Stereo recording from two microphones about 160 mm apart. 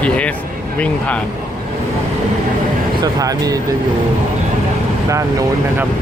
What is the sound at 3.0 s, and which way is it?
Speech, 20° right (ahead or behind).